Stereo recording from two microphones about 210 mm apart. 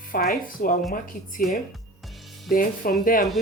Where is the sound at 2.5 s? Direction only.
40° left (ahead or behind).